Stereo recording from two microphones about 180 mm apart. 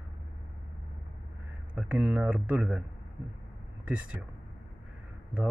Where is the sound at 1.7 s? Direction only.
10° right (ahead or behind).